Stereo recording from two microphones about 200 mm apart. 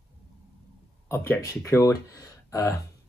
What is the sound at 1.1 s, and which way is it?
Speech, 15° left (ahead or behind).